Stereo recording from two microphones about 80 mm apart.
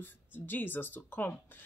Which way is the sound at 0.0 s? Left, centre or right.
Left.